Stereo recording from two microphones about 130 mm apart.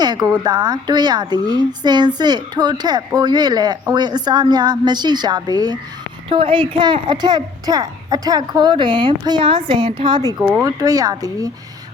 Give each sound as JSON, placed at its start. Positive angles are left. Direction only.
{"t": 0.0, "sound": "a woman's voice", "side_deg": -30}
{"t": 6.2, "sound": "a woman's voice", "side_deg": -40}